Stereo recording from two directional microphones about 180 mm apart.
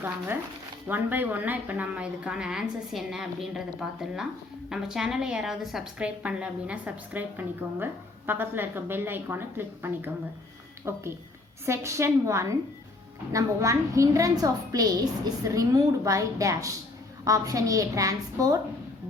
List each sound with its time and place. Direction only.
0.9 s a woman's voice: 10° right (ahead or behind)